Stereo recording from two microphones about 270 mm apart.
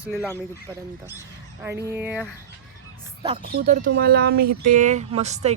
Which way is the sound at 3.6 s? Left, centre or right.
Right.